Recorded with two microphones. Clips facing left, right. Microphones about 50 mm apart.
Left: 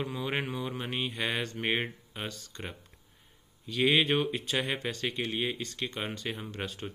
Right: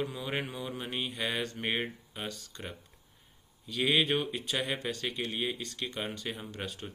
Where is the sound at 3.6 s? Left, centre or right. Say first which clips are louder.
Left 2 dB; centre.